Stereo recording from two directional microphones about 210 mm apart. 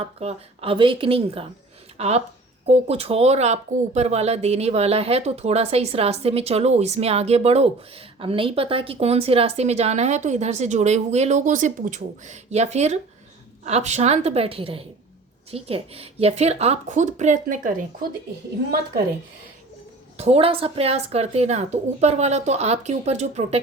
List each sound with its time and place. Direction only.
0.0 s speech: 30° right (ahead or behind)
20.1 s speech: 30° right (ahead or behind)